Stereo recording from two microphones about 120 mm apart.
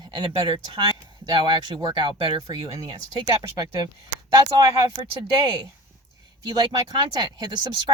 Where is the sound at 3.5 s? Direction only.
35° right (ahead or behind).